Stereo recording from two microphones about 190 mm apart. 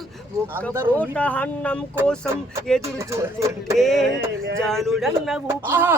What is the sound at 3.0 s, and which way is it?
Speech, 15° right (ahead or behind).